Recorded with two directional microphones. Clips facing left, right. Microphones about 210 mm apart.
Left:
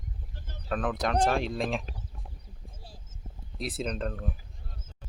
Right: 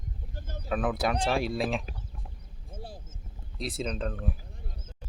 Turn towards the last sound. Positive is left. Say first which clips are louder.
# even
turn(degrees=0)  # may be behind; listen again after turning